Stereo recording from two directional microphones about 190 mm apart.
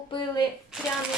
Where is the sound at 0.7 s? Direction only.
5° right (ahead or behind).